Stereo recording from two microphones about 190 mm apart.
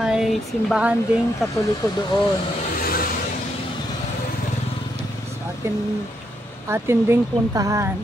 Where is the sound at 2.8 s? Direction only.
50° left (ahead or behind).